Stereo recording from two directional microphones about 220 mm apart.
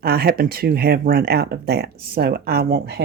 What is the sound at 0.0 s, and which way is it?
Speech, 45° right (ahead or behind).